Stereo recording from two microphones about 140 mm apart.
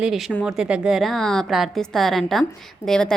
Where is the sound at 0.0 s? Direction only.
5° right (ahead or behind).